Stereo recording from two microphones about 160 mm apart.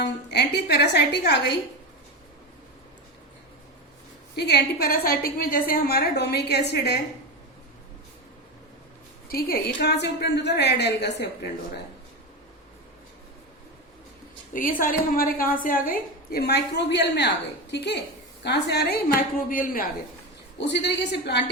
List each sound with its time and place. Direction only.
0.0 s a woman's voice: 90° left
4.4 s a woman's voice: 90° left
9.3 s a woman's voice: 80° left
14.5 s a woman's voice: 60° left (ahead or behind)
20.6 s a woman's voice: 90° left